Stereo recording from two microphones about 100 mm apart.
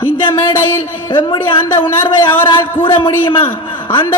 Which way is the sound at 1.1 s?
55° left (ahead or behind).